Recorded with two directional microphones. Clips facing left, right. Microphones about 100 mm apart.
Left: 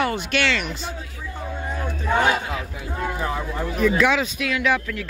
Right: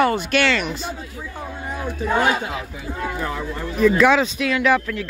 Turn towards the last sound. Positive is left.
turn(degrees=-40)  # may be behind; listen again after turning